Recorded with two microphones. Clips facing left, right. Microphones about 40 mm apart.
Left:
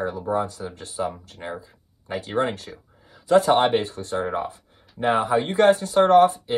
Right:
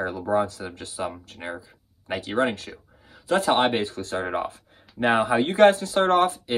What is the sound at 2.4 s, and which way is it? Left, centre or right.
Speech, right.